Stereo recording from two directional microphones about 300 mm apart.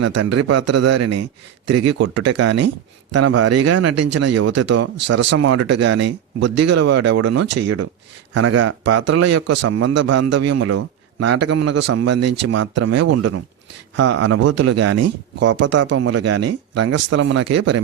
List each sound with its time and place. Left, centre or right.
0.0 s speech: right
1.6 s a man's voice: right